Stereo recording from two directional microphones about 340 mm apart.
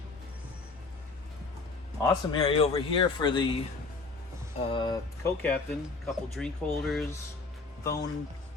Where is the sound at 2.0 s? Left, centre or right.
Centre.